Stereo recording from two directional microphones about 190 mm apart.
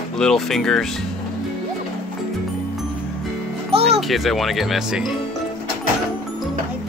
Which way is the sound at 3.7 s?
30° right (ahead or behind).